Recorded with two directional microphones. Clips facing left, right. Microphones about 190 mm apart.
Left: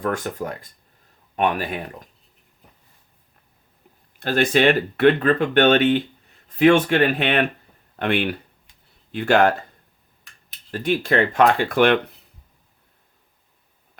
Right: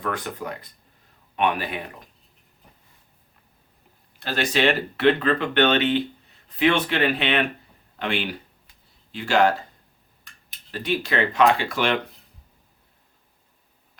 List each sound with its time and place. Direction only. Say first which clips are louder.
0.0 s speech: left 4 dB; 45° left (ahead or behind)
4.2 s speech: left 5 dB; 50° left (ahead or behind)
10.7 s speech: left 5 dB; 50° left (ahead or behind)